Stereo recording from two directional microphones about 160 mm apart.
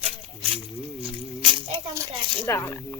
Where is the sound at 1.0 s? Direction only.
35° right (ahead or behind).